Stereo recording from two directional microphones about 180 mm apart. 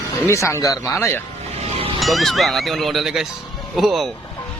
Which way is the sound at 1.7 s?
30° right (ahead or behind).